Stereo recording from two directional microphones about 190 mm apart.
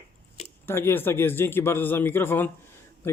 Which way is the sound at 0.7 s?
10° left (ahead or behind).